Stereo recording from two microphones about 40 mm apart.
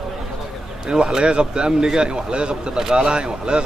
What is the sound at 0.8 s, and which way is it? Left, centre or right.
A man's voice, right.